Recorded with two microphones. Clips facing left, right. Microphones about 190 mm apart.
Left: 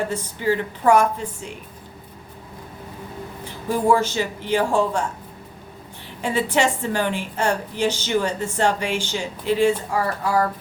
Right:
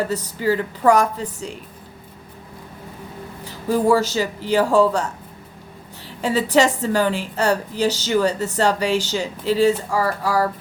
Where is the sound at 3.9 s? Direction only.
35° right (ahead or behind).